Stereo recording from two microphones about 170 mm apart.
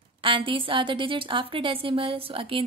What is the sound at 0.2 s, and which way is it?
A woman's voice, 30° right (ahead or behind).